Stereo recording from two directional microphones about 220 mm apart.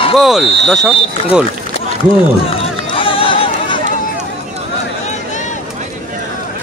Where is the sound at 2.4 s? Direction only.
25° left (ahead or behind).